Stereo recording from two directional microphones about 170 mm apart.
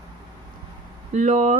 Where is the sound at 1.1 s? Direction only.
45° right (ahead or behind).